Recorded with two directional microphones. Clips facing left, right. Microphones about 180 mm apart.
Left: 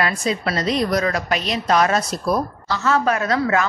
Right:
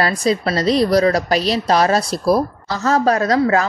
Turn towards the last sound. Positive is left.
turn(degrees=-35)  # may be behind; listen again after turning